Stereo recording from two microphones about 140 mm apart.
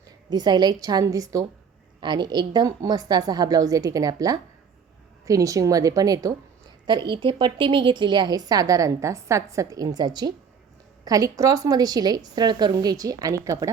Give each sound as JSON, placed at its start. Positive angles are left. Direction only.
{"t": 0.3, "sound": "a woman's voice", "side_deg": -30}